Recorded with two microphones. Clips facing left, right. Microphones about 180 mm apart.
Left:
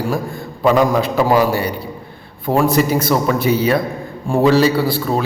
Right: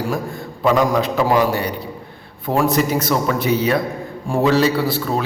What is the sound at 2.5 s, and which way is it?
Speech, 35° left (ahead or behind).